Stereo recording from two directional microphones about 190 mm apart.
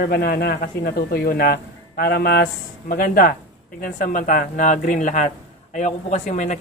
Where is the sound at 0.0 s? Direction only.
55° left (ahead or behind).